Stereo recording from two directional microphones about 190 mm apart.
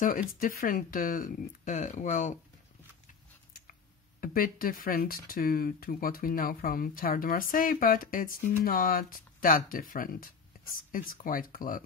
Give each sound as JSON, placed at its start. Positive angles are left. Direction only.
{"t": 0.4, "sound": "speech", "side_deg": 50}
{"t": 4.2, "sound": "speech", "side_deg": 50}